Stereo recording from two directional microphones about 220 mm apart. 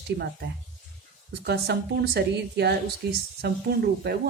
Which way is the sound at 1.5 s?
50° right (ahead or behind).